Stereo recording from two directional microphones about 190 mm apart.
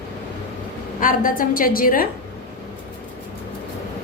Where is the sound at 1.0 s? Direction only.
45° left (ahead or behind).